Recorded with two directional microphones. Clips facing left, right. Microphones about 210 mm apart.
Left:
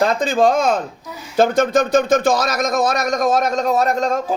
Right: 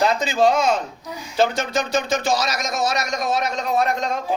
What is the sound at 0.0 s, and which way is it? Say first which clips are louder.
Speech: left 3 dB; 50° left (ahead or behind).